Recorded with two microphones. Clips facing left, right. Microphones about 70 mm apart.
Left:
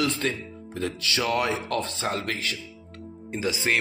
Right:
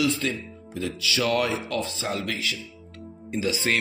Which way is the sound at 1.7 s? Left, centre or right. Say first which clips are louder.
Left 1 dB; left.